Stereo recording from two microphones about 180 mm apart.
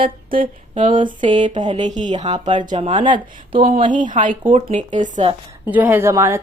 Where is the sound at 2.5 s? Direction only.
25° right (ahead or behind); by 5.2 s 45° right (ahead or behind).